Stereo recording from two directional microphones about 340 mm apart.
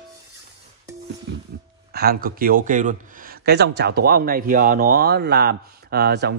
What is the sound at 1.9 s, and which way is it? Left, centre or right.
Speech, right.